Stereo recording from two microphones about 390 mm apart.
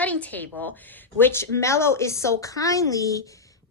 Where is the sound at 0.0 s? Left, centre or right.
Centre.